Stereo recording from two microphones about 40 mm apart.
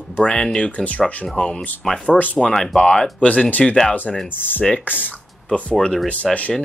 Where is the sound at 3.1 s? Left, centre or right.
Left.